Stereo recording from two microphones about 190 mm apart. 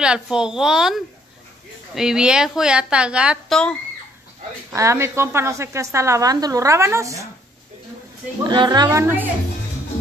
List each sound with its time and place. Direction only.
0.0 s a woman's voice: 5° right (ahead or behind)
4.6 s a woman's voice: 15° right (ahead or behind)
8.5 s speech: 20° right (ahead or behind)
9.0 s a woman's voice: 10° right (ahead or behind)